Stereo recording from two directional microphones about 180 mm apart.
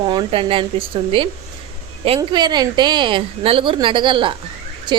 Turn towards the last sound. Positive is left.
turn(degrees=-25)  # may be behind; listen again after turning